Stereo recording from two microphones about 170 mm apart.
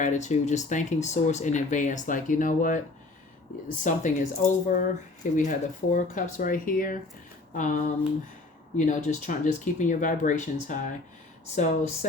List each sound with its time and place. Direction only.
0.0 s speech: 45° left (ahead or behind)
3.8 s speech: 45° left (ahead or behind)
8.8 s speech: 45° left (ahead or behind)